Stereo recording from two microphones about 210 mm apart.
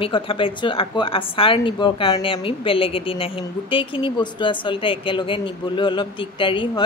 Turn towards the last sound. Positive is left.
turn(degrees=20)  # may be behind; listen again after turning